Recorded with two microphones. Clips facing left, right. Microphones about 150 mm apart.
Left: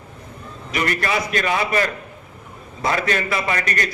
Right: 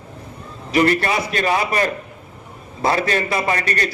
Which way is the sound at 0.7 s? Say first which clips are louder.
Right 5 dB; 30° right (ahead or behind).